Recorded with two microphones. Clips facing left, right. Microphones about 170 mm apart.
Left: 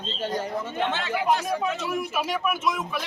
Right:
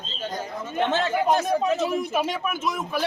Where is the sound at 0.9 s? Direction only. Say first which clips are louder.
Right 4 dB; 45° right (ahead or behind).